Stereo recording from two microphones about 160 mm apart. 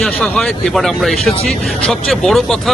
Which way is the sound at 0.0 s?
5° left (ahead or behind).